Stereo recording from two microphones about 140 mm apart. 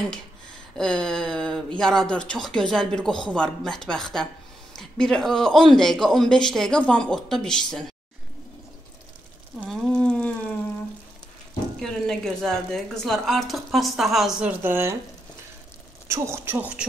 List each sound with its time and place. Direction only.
0.7 s a man's voice: 5° left (ahead or behind)
9.7 s a sound: 5° left (ahead or behind)
11.8 s a man's voice: 5° left (ahead or behind)
14.6 s speech: 15° right (ahead or behind)
16.1 s speech: 20° right (ahead or behind)